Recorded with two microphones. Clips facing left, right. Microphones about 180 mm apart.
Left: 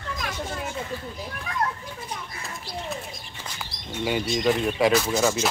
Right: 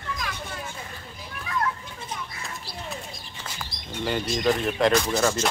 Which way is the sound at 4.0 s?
5° left (ahead or behind).